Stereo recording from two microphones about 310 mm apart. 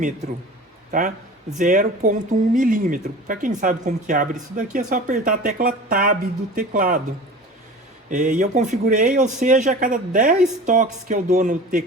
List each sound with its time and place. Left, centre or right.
0.9 s a man's voice: right
8.1 s speech: right